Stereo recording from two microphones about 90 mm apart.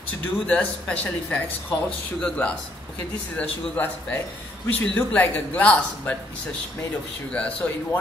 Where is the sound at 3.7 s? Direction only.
20° left (ahead or behind).